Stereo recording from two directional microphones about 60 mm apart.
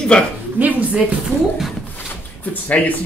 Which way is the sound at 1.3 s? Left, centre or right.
Right.